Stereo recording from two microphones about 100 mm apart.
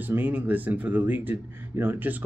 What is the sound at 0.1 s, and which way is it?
Speech, 20° right (ahead or behind).